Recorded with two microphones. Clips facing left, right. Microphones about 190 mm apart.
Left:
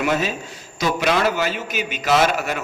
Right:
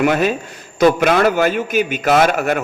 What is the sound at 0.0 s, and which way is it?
A man's voice, 55° right (ahead or behind).